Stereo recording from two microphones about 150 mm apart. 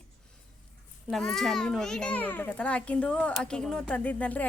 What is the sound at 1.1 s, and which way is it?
A child's voice, 5° left (ahead or behind).